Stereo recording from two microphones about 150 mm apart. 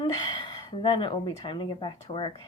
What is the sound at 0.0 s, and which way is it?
A woman's voice, 30° left (ahead or behind).